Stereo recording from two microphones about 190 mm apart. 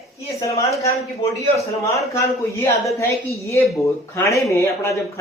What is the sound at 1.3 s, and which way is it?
A woman's voice, 15° left (ahead or behind).